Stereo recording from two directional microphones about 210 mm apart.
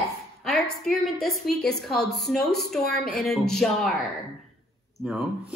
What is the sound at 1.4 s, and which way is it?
A woman's voice, centre (ahead or behind).